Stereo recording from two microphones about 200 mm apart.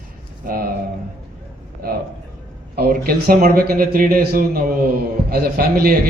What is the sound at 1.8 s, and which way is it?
A man's voice, 50° right (ahead or behind).